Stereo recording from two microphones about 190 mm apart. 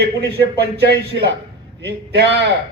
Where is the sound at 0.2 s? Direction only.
60° right (ahead or behind).